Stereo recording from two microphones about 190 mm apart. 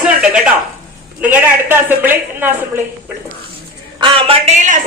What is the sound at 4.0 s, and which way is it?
Speech, 30° right (ahead or behind).